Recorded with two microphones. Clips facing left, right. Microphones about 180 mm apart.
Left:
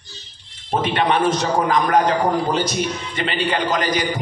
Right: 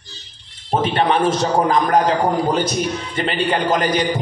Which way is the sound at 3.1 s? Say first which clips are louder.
Right 2 dB; 45° right (ahead or behind).